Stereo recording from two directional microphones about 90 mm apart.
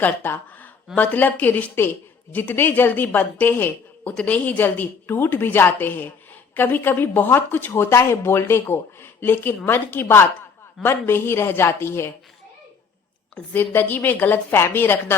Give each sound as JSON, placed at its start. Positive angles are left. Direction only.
{"t": 0.0, "sound": "speech", "side_deg": 20}
{"t": 13.3, "sound": "speech", "side_deg": 20}